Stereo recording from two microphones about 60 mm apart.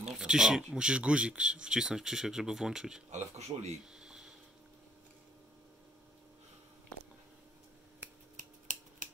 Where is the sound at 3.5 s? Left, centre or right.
Right.